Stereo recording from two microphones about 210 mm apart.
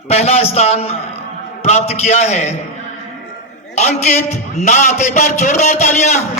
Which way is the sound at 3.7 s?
30° left (ahead or behind).